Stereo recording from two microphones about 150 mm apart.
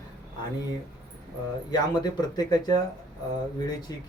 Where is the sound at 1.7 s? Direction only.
25° left (ahead or behind).